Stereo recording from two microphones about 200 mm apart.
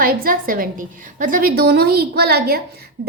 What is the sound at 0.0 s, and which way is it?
A woman's voice, 45° right (ahead or behind).